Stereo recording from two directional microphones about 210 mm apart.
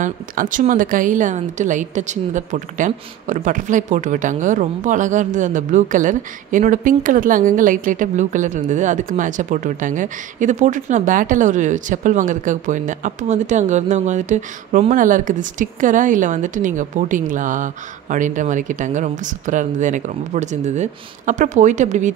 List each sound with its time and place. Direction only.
0.0 s a woman's voice: 40° right (ahead or behind)